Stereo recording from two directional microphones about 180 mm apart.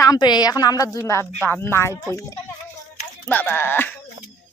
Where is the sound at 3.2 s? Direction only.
10° left (ahead or behind).